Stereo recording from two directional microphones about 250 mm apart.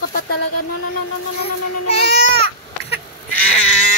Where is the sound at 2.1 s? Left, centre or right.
Left.